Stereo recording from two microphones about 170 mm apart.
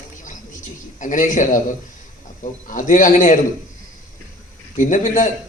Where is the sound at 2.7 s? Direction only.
50° left (ahead or behind).